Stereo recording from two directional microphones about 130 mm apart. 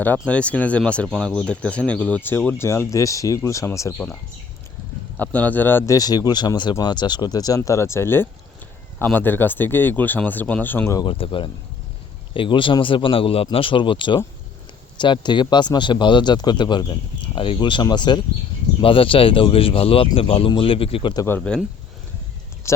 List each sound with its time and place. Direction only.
0.3 s speech: 10° left (ahead or behind)
3.9 s speech: 10° left (ahead or behind)
10.9 s speech: 40° left (ahead or behind)
21.2 s speech: 10° left (ahead or behind)
22.6 s a sound: 20° left (ahead or behind)